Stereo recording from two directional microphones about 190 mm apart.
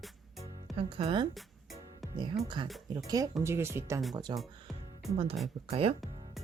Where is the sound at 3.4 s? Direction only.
15° right (ahead or behind).